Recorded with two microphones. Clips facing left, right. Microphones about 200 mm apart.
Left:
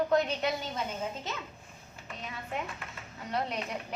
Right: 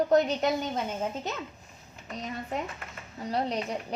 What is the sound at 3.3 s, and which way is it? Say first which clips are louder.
Speech: right 4 dB; 35° right (ahead or behind).